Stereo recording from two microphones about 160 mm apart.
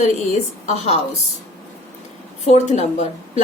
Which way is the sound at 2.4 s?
45° left (ahead or behind).